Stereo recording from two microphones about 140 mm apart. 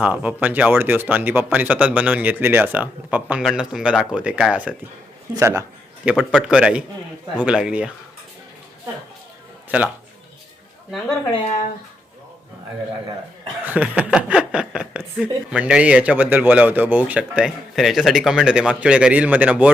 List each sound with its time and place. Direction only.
0.0 s speech: 10° right (ahead or behind)
5.3 s a man's voice: 20° right (ahead or behind)
6.1 s speech: 5° right (ahead or behind)
11.4 s speech: 65° left (ahead or behind)
13.7 s speech: 10° right (ahead or behind)